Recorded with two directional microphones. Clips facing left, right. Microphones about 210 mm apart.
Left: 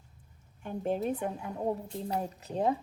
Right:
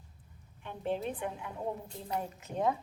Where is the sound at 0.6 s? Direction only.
45° left (ahead or behind).